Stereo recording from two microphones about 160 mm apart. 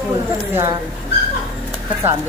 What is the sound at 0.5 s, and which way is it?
Speech, 15° right (ahead or behind).